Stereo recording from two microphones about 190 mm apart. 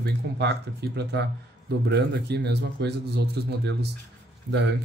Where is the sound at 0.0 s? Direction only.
60° right (ahead or behind).